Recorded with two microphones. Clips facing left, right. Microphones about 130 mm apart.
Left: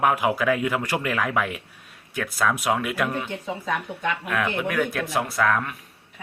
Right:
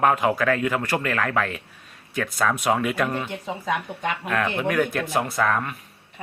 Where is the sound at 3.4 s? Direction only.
20° right (ahead or behind).